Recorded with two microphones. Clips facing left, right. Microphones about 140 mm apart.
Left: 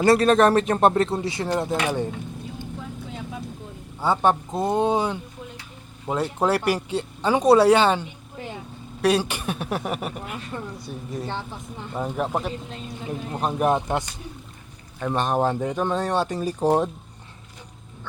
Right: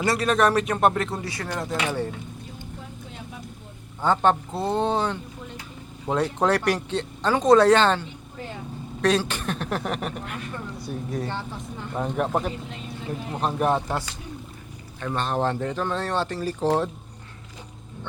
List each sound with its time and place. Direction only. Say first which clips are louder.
0.0 s speech: left 5 dB; 25° left (ahead or behind)
4.0 s speech: even; 10° left (ahead or behind)
15.0 s speech: left 3 dB; 15° left (ahead or behind)